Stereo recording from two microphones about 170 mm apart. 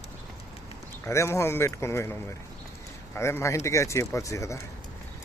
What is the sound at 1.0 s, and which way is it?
Speech, 15° left (ahead or behind).